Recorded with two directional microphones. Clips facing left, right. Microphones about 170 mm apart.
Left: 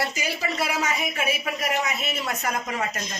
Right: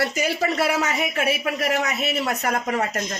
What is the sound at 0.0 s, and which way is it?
Speech, 60° right (ahead or behind).